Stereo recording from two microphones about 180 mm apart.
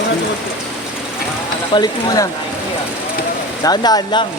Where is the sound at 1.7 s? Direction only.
20° left (ahead or behind).